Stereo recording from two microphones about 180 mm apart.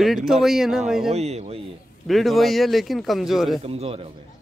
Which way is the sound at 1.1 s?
35° right (ahead or behind).